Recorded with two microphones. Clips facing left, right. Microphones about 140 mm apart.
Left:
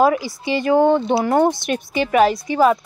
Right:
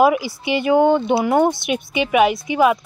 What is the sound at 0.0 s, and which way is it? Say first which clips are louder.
A woman's voice: right 1 dB; 10° right (ahead or behind).